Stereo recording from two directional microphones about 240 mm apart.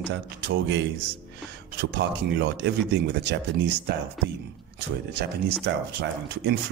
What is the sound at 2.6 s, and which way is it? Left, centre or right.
Speech, right.